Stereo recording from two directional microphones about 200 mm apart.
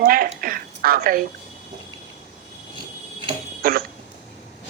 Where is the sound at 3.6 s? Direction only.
45° right (ahead or behind).